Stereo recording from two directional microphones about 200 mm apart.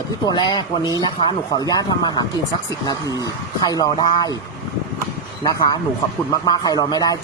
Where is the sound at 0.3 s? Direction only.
20° left (ahead or behind).